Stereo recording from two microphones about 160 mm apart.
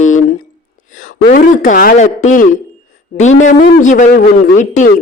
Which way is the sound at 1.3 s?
60° left (ahead or behind).